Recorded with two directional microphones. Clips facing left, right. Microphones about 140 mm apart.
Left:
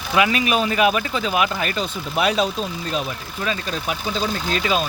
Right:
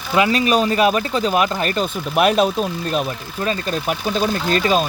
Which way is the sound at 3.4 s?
45° right (ahead or behind).